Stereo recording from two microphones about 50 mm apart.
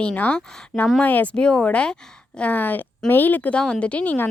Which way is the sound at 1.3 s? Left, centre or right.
Left.